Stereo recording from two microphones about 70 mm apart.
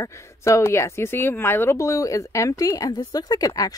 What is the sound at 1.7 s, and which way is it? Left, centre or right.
A woman's voice, left.